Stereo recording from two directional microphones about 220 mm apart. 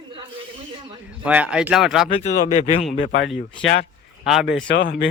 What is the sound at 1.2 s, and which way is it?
Speech, 5° right (ahead or behind).